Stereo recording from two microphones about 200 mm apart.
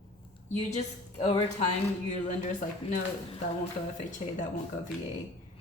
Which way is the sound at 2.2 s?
40° left (ahead or behind).